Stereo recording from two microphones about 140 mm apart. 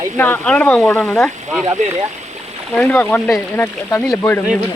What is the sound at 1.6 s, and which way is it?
Speech, 55° right (ahead or behind).